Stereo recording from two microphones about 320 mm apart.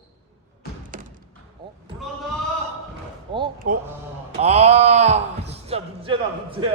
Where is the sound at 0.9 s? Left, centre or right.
Right.